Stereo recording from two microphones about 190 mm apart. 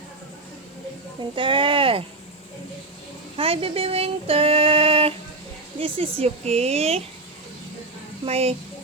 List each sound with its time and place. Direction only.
1.4 s speech: 25° right (ahead or behind)
3.3 s female singing: 30° right (ahead or behind)
5.8 s speech: 30° right (ahead or behind)
8.2 s speech: 30° right (ahead or behind)